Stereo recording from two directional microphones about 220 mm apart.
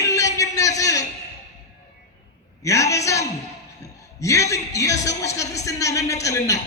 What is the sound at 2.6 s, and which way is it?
A man's voice, 15° left (ahead or behind).